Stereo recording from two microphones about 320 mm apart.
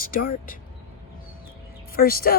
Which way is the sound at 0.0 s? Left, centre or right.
Left.